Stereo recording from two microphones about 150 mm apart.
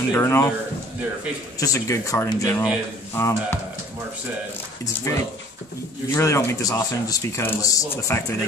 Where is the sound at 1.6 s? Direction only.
20° left (ahead or behind).